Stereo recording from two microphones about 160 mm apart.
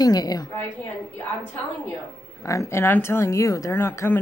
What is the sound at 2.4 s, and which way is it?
Speech, 20° left (ahead or behind).